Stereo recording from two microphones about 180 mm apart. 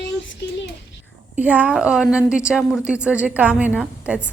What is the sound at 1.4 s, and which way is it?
A woman's voice, 10° right (ahead or behind).